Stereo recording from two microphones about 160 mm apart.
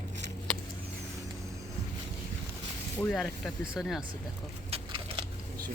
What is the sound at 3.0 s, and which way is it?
Speech, centre (ahead or behind).